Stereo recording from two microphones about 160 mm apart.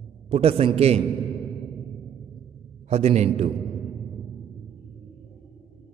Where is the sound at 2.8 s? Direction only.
40° right (ahead or behind).